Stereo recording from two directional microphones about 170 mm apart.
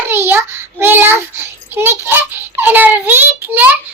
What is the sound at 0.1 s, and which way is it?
Child singing, 15° right (ahead or behind).